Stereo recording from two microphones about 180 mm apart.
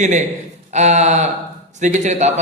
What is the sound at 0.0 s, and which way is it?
A man's voice, 40° right (ahead or behind).